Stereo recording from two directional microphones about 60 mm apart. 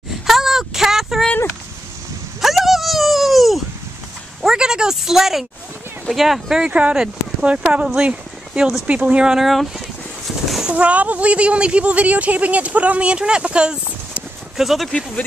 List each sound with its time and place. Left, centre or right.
0.3 s a sound: centre
2.4 s a sound: centre
6.0 s speech: centre
6.7 s speech: right; by 9.8 s centre
10.7 s speech: right
14.6 s speech: centre